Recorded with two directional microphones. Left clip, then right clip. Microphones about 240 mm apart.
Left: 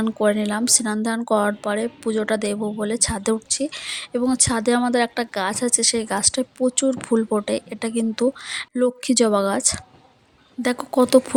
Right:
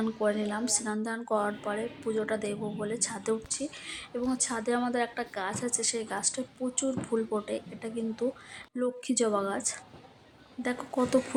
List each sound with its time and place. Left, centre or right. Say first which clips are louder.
0.0 s a woman's voice: left 9 dB; left